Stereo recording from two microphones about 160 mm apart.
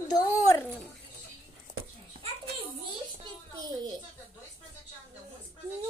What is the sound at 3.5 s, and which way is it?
Speech, 25° right (ahead or behind).